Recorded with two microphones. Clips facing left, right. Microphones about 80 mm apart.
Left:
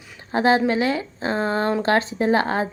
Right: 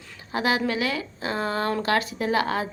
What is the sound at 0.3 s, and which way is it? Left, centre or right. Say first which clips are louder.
A woman's voice: left 6 dB; left.